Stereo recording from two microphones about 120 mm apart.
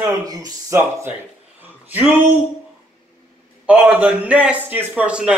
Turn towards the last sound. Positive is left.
turn(degrees=-10)  # may be behind; listen again after turning